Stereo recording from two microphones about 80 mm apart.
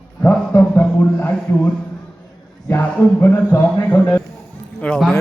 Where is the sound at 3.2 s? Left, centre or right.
Left.